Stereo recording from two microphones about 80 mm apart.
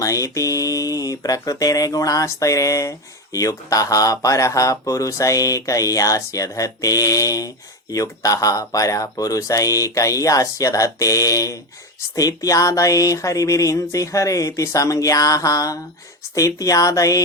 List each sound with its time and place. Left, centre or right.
0.0 s speech: left